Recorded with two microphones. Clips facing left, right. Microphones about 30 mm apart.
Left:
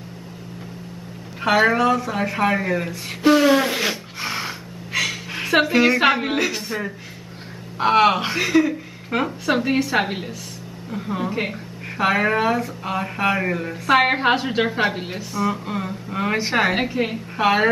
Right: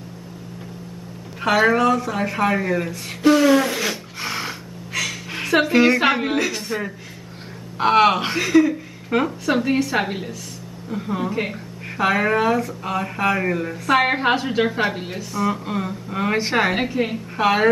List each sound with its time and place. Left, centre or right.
1.4 s speech: centre
3.9 s a sound: centre
4.9 s gasp: centre
5.3 s a woman's voice: centre
7.7 s a woman's voice: centre
10.9 s a woman's voice: centre
15.4 s a woman's voice: centre